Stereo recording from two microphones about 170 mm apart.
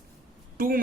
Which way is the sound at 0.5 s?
60° right (ahead or behind).